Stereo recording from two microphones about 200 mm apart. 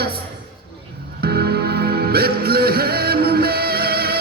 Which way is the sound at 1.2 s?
55° right (ahead or behind).